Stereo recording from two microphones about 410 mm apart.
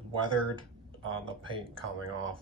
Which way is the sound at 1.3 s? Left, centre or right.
Centre.